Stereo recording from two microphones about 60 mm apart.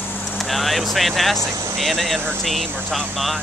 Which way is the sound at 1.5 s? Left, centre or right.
Right.